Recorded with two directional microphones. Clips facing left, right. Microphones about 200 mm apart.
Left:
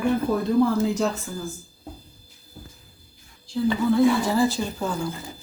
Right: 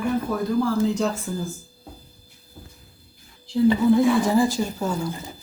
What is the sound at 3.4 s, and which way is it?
Speech, 20° right (ahead or behind).